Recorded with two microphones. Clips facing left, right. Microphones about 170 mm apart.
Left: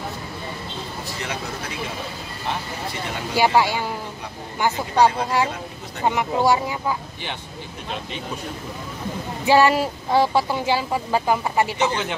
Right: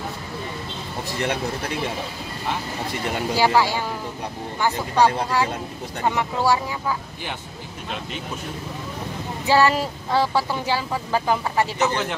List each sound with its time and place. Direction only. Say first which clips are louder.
3.3 s speech: left 2 dB; 15° left (ahead or behind)
9.5 s speech: left 2 dB; 15° left (ahead or behind)